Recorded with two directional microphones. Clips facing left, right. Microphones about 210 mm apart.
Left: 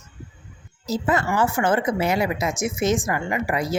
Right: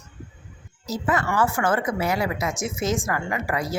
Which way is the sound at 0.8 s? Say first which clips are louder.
Left 2 dB; 25° left (ahead or behind).